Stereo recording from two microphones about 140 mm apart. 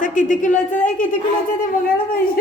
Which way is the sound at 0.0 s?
65° left (ahead or behind).